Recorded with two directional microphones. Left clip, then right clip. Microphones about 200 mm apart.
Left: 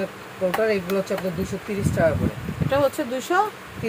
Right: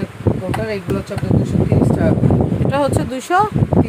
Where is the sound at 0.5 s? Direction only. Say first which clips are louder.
Left 1 dB; centre (ahead or behind).